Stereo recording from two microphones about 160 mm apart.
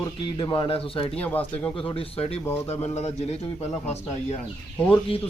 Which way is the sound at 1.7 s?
35° left (ahead or behind).